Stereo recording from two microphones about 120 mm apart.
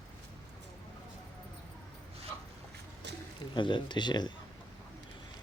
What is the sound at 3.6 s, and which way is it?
Speech, 40° left (ahead or behind).